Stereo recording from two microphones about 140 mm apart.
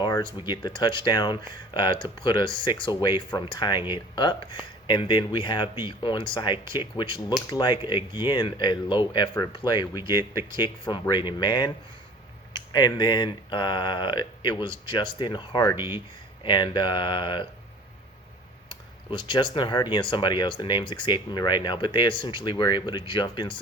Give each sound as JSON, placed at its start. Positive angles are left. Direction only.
{"t": 0.2, "sound": "speech", "side_deg": 35}
{"t": 12.7, "sound": "speech", "side_deg": 30}
{"t": 19.1, "sound": "speech", "side_deg": 35}